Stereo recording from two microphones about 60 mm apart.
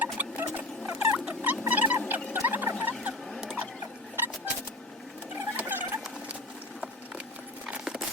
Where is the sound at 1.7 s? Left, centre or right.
Right.